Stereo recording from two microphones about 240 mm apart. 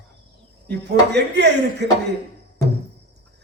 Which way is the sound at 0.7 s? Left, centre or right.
Right.